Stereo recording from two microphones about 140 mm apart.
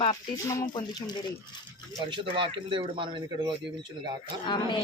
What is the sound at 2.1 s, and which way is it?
Speech, 35° right (ahead or behind).